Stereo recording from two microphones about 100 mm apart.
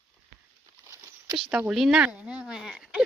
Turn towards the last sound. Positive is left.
turn(degrees=-5)  # may be behind; listen again after turning